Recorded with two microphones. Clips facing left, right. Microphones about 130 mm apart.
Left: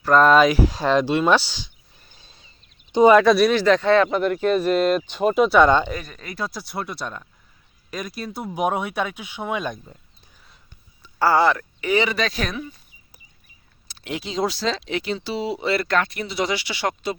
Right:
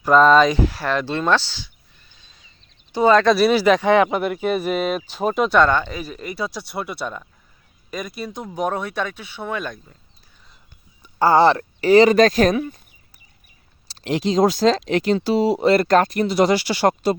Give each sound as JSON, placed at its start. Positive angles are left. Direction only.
{"t": 0.0, "sound": "speech", "side_deg": 0}
{"t": 0.7, "sound": "speech", "side_deg": 20}
{"t": 2.0, "sound": "a sound", "side_deg": 40}
{"t": 2.9, "sound": "speech", "side_deg": 15}
{"t": 3.2, "sound": "speech", "side_deg": 0}
{"t": 5.6, "sound": "speech", "side_deg": 15}
{"t": 5.9, "sound": "speech", "side_deg": -5}
{"t": 11.0, "sound": "speech", "side_deg": -20}
{"t": 12.5, "sound": "speech", "side_deg": -55}
{"t": 13.8, "sound": "speech", "side_deg": -35}